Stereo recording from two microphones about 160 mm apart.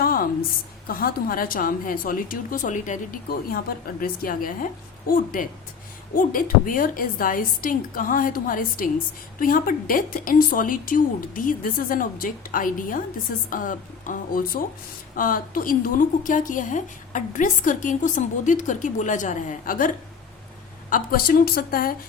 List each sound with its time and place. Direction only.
0.0 s a sound: 65° left (ahead or behind)
0.9 s a woman's voice: 65° left (ahead or behind)
20.9 s a woman's voice: 65° left (ahead or behind)